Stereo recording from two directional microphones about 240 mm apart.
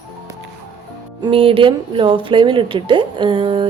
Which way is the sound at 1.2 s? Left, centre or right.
Right.